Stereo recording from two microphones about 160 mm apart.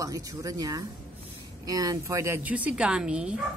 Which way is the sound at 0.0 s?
20° right (ahead or behind).